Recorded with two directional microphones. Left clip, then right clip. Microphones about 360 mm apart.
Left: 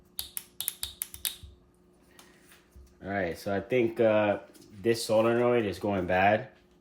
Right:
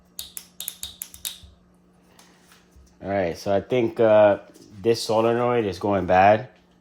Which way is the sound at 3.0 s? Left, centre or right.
Centre.